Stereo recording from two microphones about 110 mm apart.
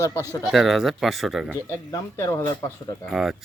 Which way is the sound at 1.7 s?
25° left (ahead or behind).